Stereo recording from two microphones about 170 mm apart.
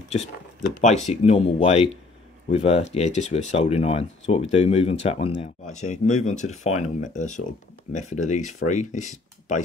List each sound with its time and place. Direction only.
0.7 s speech: 40° left (ahead or behind)